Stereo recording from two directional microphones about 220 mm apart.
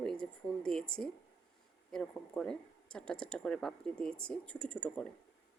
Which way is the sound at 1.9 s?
5° left (ahead or behind).